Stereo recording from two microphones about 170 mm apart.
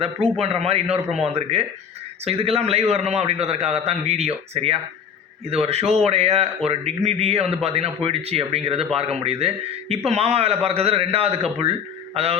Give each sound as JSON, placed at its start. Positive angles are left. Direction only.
{"t": 0.0, "sound": "a man's voice", "side_deg": -35}